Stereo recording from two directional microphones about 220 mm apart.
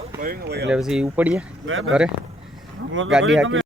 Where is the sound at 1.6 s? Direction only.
65° right (ahead or behind).